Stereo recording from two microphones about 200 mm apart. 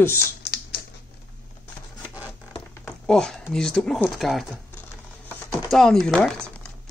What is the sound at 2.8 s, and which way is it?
Speech, 5° left (ahead or behind).